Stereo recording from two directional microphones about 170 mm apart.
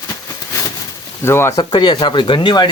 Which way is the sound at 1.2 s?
15° left (ahead or behind).